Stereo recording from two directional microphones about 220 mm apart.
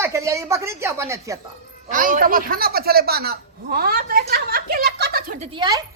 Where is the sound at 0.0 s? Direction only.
15° right (ahead or behind).